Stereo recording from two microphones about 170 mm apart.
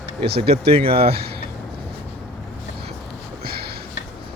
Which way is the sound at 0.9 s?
65° right (ahead or behind).